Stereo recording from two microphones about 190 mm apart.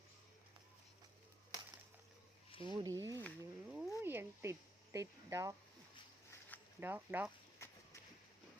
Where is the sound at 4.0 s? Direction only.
10° right (ahead or behind).